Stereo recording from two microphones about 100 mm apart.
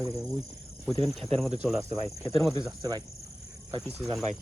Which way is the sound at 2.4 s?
30° left (ahead or behind).